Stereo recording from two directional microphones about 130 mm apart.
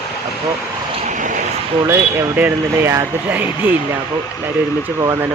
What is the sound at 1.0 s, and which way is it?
Vehicle, 75° right (ahead or behind).